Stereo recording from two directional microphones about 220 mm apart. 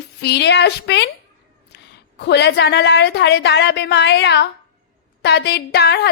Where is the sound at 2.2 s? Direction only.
50° left (ahead or behind).